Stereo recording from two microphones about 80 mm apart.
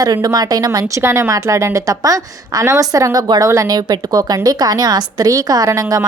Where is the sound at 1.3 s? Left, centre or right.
Right.